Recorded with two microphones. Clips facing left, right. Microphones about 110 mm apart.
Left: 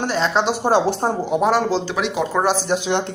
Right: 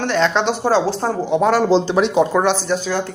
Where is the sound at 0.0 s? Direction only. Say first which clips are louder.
Right 2 dB; 5° left (ahead or behind).